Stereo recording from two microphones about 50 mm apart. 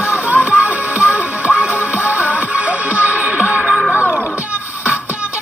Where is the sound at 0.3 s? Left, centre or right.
Right.